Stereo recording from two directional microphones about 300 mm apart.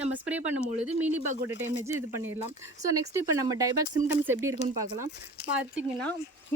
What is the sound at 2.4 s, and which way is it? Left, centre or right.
Speech, centre.